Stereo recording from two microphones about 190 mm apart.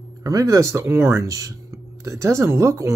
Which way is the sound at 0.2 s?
15° right (ahead or behind).